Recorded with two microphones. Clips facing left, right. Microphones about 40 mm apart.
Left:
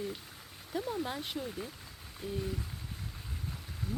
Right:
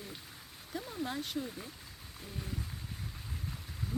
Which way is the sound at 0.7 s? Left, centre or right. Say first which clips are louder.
Left 3 dB; centre.